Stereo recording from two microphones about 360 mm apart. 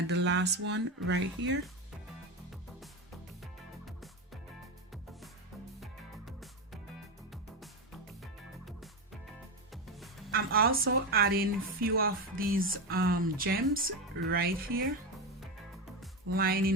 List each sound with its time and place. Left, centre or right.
0.1 s a woman's voice: right
3.4 s music: centre
5.8 s music: centre
8.2 s music: centre
10.3 s a woman's voice: right
16.3 s a woman's voice: right